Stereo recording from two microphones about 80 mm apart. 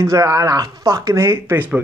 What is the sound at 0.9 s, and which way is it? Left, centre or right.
Speech, right.